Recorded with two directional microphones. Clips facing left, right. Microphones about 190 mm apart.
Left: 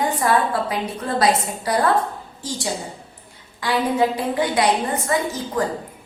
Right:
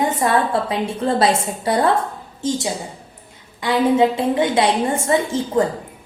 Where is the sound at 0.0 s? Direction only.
25° right (ahead or behind).